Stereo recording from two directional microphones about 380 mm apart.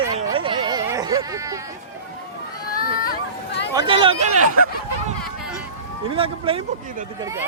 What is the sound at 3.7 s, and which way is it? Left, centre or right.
Speech, centre.